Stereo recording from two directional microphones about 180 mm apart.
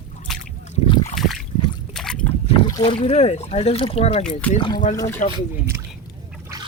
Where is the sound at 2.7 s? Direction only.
25° left (ahead or behind).